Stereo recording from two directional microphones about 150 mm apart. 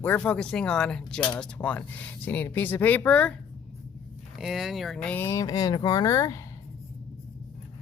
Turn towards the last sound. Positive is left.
turn(degrees=25)  # may be behind; listen again after turning